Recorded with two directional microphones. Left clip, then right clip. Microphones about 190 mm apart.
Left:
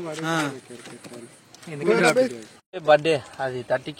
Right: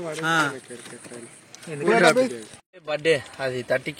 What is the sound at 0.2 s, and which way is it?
Speech, 65° left (ahead or behind).